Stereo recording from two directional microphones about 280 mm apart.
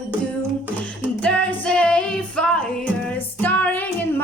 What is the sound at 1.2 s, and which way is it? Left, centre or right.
Music, centre.